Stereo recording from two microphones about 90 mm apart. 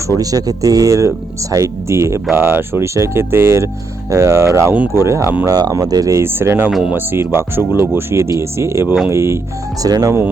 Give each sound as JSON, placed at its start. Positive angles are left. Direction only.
{"t": 0.1, "sound": "speech", "side_deg": -40}
{"t": 5.5, "sound": "speech", "side_deg": -45}
{"t": 6.2, "sound": "speech", "side_deg": -25}
{"t": 6.7, "sound": "speech", "side_deg": -10}
{"t": 6.9, "sound": "speech", "side_deg": -25}
{"t": 9.8, "sound": "speech", "side_deg": -40}